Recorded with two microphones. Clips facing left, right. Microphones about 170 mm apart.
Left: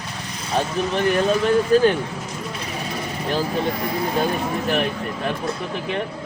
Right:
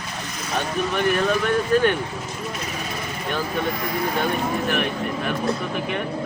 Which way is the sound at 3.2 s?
30° left (ahead or behind).